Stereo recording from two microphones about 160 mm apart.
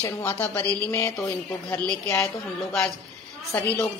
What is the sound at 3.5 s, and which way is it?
Speech, 20° left (ahead or behind).